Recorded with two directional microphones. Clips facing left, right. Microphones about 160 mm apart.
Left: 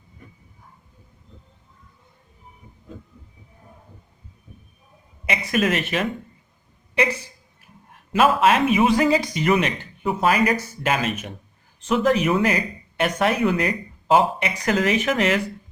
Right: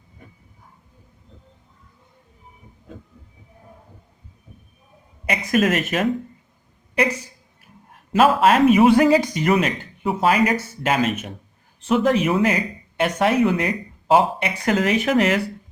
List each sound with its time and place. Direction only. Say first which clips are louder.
5.5 s speech: right 3 dB; 35° right (ahead or behind)
8.1 s speech: right 2 dB; 35° right (ahead or behind)